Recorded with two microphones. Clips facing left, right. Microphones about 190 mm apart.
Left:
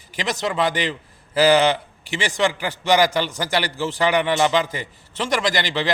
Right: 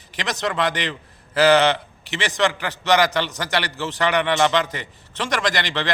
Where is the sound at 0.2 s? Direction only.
5° left (ahead or behind).